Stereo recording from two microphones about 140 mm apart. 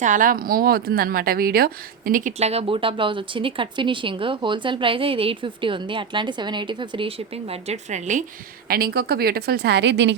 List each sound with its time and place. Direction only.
0.0 s a woman's voice: 70° right (ahead or behind)
2.4 s a woman's voice: 45° right (ahead or behind)
8.6 s a woman's voice: 90° right